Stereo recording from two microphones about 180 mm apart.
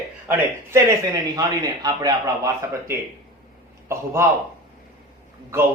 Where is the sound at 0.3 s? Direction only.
15° right (ahead or behind).